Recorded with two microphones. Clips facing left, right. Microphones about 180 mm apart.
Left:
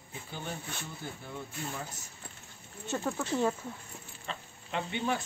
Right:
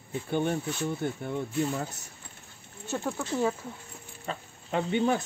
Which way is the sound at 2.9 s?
Centre (ahead or behind).